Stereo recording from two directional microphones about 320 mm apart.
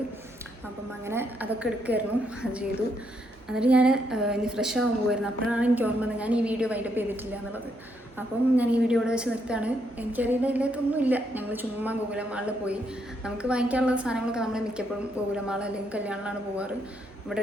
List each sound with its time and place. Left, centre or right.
1.0 s a woman's voice: centre
8.5 s a woman's voice: centre